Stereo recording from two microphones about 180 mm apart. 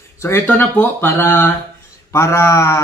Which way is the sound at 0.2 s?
15° left (ahead or behind).